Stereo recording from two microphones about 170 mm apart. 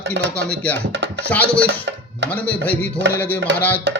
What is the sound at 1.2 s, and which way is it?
Speech, 10° left (ahead or behind).